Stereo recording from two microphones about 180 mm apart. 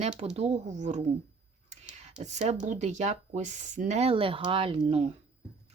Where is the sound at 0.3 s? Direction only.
40° right (ahead or behind).